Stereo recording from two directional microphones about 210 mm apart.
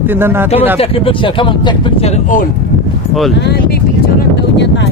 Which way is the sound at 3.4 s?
50° left (ahead or behind).